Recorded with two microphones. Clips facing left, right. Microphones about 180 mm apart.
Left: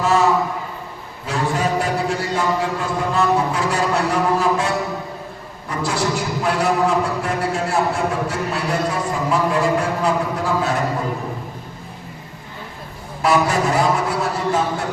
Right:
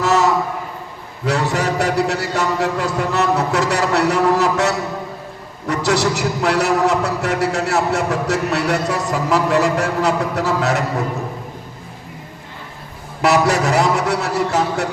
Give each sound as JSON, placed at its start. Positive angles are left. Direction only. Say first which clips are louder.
{"t": 0.0, "sound": "a sound", "louder": "right 1 dB", "side_deg": -80}
{"t": 1.2, "sound": "a man's voice", "louder": "right 2 dB", "side_deg": -75}
{"t": 13.2, "sound": "a man's voice", "louder": "right 2 dB", "side_deg": -75}